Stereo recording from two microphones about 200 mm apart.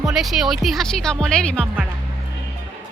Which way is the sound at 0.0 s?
Centre (ahead or behind).